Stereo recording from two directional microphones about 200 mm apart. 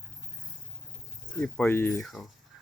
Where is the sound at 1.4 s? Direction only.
10° left (ahead or behind).